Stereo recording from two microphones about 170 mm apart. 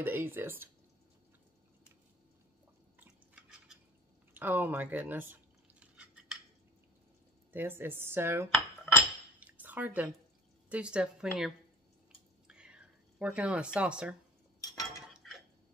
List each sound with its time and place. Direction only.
0.0 s a woman's voice: 10° right (ahead or behind)
3.0 s drip: 5° right (ahead or behind)
4.3 s a sound: 10° right (ahead or behind)
7.5 s a woman's voice: 15° right (ahead or behind)
9.4 s drip: 10° right (ahead or behind)
10.7 s a woman's voice: 5° right (ahead or behind)
12.4 s a sound: 5° right (ahead or behind)
14.6 s cutlery: 20° left (ahead or behind)
15.1 s dishes: centre (ahead or behind)